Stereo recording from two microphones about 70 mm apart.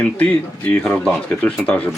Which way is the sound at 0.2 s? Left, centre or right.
Centre.